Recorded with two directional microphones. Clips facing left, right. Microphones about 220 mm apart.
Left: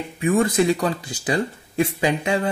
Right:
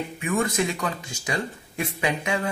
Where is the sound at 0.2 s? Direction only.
35° left (ahead or behind).